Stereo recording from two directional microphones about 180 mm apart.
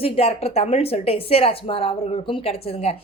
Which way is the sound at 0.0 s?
35° left (ahead or behind).